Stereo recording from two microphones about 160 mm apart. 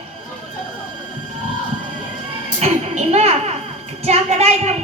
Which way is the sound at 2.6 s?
45° right (ahead or behind).